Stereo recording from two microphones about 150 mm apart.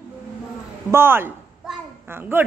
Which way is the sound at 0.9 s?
15° right (ahead or behind).